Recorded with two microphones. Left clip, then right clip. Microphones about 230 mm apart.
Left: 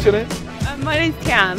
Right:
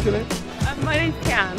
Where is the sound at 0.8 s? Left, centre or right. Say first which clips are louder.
Left 4 dB; left.